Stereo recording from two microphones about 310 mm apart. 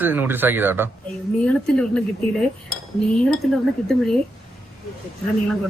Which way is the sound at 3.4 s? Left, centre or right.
Centre.